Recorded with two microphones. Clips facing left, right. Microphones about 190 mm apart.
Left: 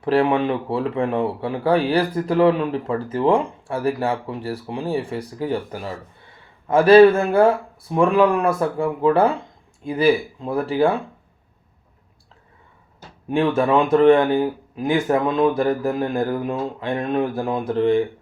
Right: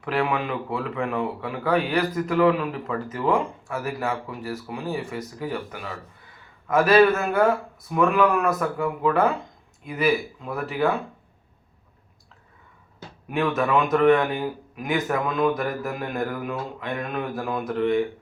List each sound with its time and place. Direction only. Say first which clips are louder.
0.0 s speech: left 7 dB; 30° left (ahead or behind)
13.2 s speech: left 5 dB; 30° left (ahead or behind)